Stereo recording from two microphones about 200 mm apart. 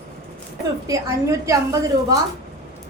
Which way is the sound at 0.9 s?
15° right (ahead or behind).